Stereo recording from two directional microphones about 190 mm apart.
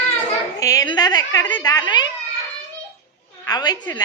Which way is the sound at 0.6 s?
20° left (ahead or behind).